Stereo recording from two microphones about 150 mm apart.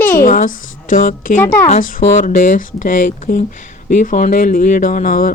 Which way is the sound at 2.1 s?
65° left (ahead or behind).